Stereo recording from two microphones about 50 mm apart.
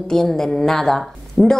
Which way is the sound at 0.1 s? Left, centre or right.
Centre.